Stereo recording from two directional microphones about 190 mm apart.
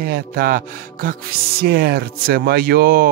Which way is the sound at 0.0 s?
50° right (ahead or behind).